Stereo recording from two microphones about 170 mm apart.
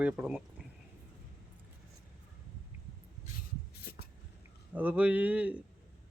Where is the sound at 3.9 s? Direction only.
60° left (ahead or behind).